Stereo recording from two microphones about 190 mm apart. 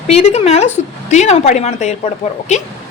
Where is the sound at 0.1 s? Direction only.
30° left (ahead or behind).